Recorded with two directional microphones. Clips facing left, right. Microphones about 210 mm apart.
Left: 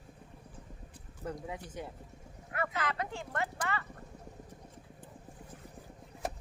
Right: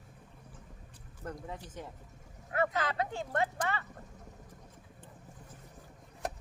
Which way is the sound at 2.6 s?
30° right (ahead or behind).